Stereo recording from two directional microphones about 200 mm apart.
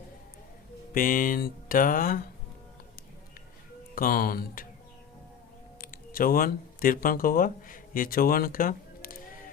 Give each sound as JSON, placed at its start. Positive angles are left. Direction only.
{"t": 0.9, "sound": "speech", "side_deg": 45}
{"t": 3.9, "sound": "speech", "side_deg": 45}
{"t": 5.8, "sound": "speech", "side_deg": 45}